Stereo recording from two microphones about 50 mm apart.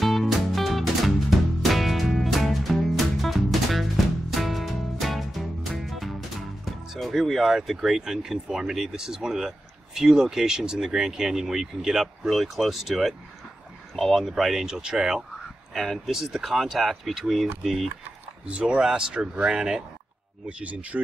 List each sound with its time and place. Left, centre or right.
0.0 s music: centre
6.6 s speech: centre
14.3 s speech: centre
15.7 s speech: centre
18.5 s speech: centre
20.4 s speech: right